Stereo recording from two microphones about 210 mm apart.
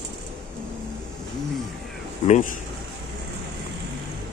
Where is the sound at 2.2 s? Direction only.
35° left (ahead or behind).